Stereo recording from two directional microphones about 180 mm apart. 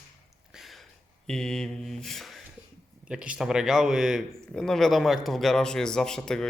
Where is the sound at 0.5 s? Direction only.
Centre (ahead or behind).